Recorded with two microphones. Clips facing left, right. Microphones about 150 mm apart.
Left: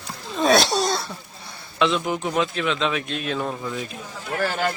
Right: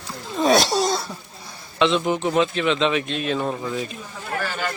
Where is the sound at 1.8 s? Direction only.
Centre (ahead or behind).